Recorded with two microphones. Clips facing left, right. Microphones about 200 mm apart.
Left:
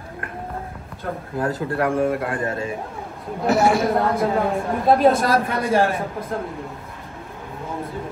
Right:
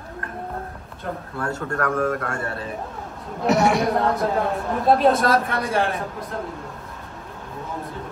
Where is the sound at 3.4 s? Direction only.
Centre (ahead or behind).